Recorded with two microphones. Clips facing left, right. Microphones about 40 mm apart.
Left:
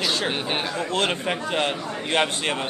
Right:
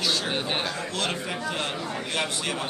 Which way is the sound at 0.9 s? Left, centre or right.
Left.